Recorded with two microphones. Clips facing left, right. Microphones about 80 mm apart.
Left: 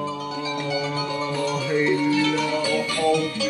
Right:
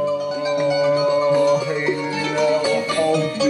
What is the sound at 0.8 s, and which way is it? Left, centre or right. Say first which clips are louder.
Music: right 10 dB; centre.